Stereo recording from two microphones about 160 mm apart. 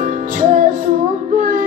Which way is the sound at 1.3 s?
55° right (ahead or behind).